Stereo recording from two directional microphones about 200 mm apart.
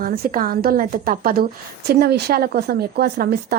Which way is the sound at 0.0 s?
45° right (ahead or behind).